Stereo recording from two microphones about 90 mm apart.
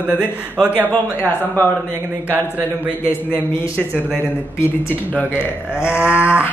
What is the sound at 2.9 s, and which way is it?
Speech, 20° left (ahead or behind).